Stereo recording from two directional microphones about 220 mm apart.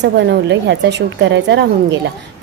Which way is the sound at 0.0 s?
50° right (ahead or behind).